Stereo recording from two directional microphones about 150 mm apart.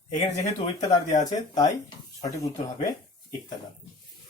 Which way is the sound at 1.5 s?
25° left (ahead or behind).